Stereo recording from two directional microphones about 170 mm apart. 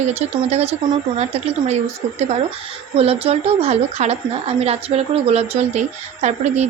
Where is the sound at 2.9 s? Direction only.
35° right (ahead or behind).